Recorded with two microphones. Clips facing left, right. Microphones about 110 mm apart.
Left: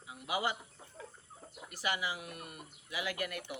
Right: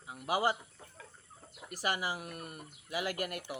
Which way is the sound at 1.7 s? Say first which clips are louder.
Right 2 dB; 40° right (ahead or behind).